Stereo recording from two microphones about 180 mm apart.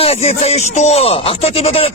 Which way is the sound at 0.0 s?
35° left (ahead or behind).